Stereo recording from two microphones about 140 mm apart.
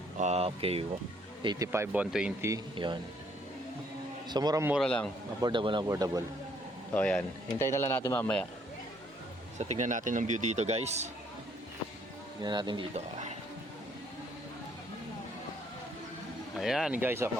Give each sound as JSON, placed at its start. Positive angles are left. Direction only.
{"t": 0.2, "sound": "speech", "side_deg": -50}
{"t": 1.4, "sound": "speech", "side_deg": -30}
{"t": 2.7, "sound": "speech", "side_deg": -35}
{"t": 4.3, "sound": "speech", "side_deg": -30}
{"t": 4.8, "sound": "speech", "side_deg": 5}
{"t": 5.4, "sound": "speech", "side_deg": -35}
{"t": 5.9, "sound": "speech", "side_deg": -25}
{"t": 6.9, "sound": "speech", "side_deg": 10}
{"t": 9.6, "sound": "a man's voice", "side_deg": -55}
{"t": 12.4, "sound": "speech", "side_deg": -30}
{"t": 12.9, "sound": "speech", "side_deg": -55}
{"t": 16.6, "sound": "speech", "side_deg": -5}
{"t": 17.0, "sound": "speech", "side_deg": -15}